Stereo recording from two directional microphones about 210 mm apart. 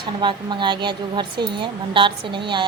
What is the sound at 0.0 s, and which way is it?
A woman's voice, 20° right (ahead or behind).